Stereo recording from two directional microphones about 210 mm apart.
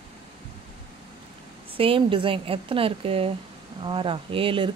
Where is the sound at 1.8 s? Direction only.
25° right (ahead or behind).